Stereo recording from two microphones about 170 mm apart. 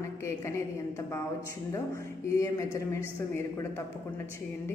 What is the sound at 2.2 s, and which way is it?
A woman's voice, 20° left (ahead or behind).